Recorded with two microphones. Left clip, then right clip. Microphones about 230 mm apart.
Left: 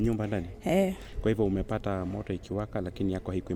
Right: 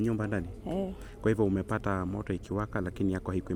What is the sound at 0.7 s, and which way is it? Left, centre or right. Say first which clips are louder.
Speech: left 9 dB; left.